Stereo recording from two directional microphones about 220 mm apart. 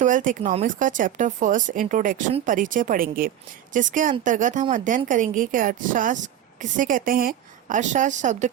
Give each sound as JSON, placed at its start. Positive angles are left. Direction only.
{"t": 0.0, "sound": "speech", "side_deg": -35}